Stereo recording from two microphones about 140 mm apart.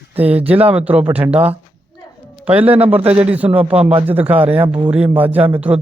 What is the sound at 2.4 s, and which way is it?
Speech, 10° right (ahead or behind).